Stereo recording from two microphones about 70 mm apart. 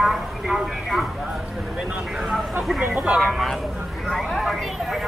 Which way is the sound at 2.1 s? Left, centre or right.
Centre.